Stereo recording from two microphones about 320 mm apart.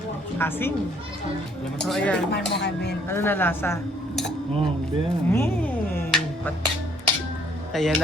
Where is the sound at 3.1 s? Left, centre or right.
Centre.